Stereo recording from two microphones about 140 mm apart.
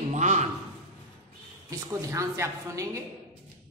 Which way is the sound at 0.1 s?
60° right (ahead or behind).